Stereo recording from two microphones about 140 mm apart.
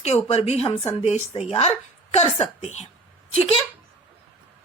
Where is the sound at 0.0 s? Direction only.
50° left (ahead or behind).